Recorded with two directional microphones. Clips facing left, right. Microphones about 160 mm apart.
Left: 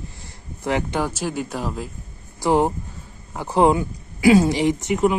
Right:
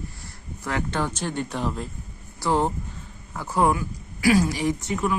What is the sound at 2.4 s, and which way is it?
Speech, 15° left (ahead or behind).